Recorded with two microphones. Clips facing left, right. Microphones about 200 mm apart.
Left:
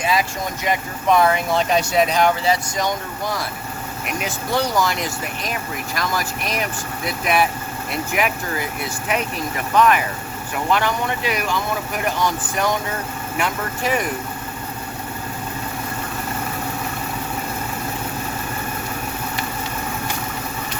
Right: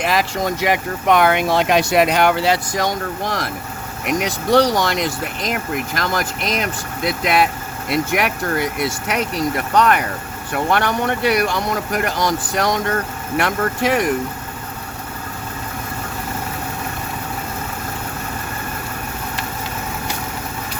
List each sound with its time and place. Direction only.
0.1 s speech: 80° right
7.9 s speech: 75° right (ahead or behind); by 12.8 s 90° right
13.3 s speech: 75° right (ahead or behind)